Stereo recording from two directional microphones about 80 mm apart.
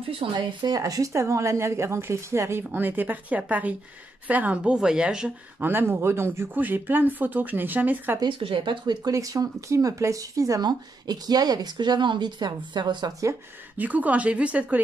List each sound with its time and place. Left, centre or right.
0.2 s speech: right
0.7 s a woman's voice: right
2.7 s a woman's voice: right
5.6 s speech: right
8.2 s speech: right
9.1 s speech: right
13.7 s a woman's voice: centre